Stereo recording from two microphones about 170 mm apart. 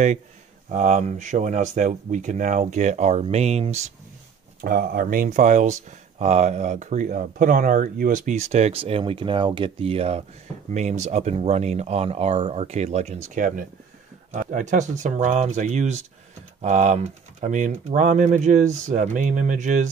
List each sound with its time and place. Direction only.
0.7 s speech: 45° right (ahead or behind)
4.6 s speech: 60° right (ahead or behind)